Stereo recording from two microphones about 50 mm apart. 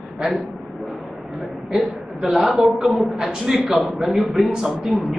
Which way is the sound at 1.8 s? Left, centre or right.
Centre.